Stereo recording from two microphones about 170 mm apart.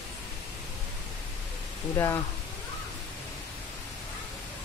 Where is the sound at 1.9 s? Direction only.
15° left (ahead or behind).